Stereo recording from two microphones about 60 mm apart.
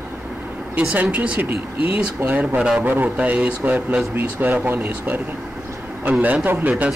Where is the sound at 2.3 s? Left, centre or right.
Centre.